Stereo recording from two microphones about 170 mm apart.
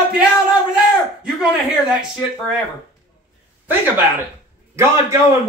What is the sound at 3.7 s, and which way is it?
Speech, 10° right (ahead or behind).